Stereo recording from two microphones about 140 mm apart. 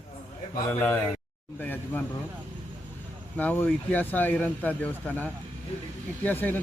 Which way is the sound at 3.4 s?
10° left (ahead or behind).